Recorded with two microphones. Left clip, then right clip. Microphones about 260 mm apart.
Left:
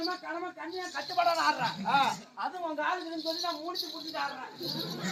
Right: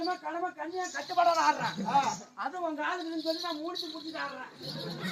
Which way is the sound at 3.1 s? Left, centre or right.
Centre.